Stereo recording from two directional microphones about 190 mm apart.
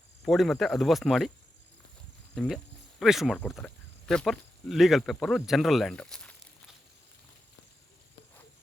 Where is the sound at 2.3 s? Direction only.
Centre (ahead or behind).